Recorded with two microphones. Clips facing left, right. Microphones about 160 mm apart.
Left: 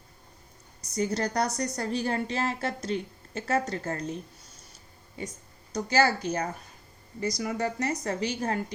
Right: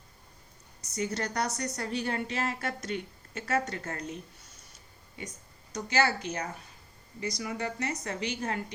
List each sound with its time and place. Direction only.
0.9 s a woman's voice: 35° left (ahead or behind)